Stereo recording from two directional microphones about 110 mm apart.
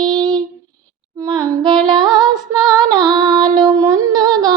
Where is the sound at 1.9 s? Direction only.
40° right (ahead or behind).